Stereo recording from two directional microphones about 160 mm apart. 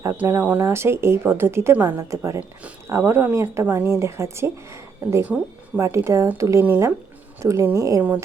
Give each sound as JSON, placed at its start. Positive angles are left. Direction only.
{"t": 0.0, "sound": "a woman's voice", "side_deg": -15}